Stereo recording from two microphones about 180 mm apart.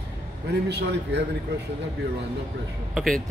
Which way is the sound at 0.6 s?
70° right (ahead or behind).